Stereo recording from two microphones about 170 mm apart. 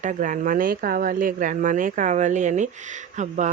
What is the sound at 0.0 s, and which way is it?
Speech, 50° right (ahead or behind).